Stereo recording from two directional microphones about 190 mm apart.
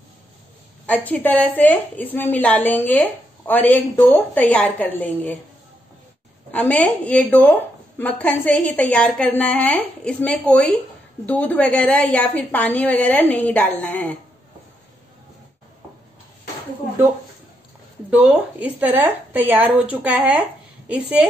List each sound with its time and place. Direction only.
0.8 s a woman's voice: 10° left (ahead or behind)
6.5 s a woman's voice: 5° left (ahead or behind)
18.1 s speech: 10° right (ahead or behind)